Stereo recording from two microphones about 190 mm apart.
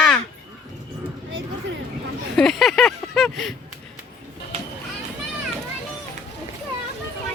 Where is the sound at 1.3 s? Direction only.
90° right.